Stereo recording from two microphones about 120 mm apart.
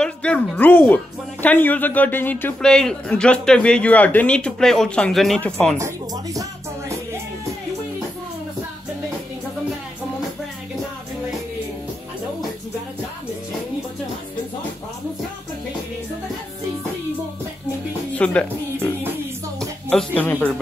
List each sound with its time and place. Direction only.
0.0 s speech: 10° left (ahead or behind)
2.7 s speech: 5° left (ahead or behind)
5.8 s speech: 25° right (ahead or behind)
18.1 s speech: 10° left (ahead or behind)
19.9 s speech: 10° left (ahead or behind)